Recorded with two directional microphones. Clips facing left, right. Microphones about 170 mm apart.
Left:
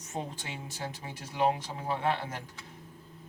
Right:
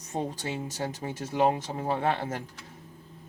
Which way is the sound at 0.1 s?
40° right (ahead or behind).